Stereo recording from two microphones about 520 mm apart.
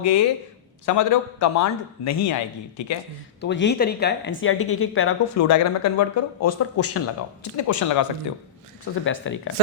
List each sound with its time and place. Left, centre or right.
0.0 s a man's voice: left
3.4 s a man's voice: centre
8.8 s speech: left